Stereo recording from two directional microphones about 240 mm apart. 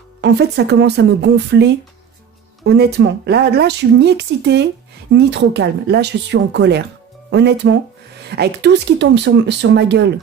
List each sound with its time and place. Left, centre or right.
0.2 s speech: right